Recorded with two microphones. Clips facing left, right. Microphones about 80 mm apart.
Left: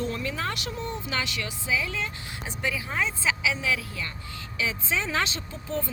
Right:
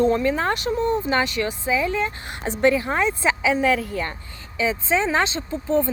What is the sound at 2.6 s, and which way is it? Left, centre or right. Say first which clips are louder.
Speech: right 10 dB; right.